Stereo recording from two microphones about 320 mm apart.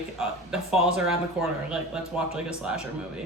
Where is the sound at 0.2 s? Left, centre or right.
Centre.